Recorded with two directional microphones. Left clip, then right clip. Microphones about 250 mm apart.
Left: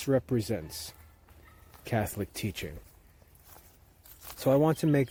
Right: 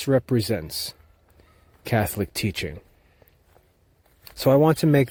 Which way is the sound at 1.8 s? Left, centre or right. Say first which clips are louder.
Right 8 dB; right.